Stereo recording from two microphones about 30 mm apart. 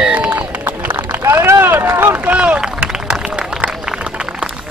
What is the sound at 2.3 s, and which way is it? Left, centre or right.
Run, right.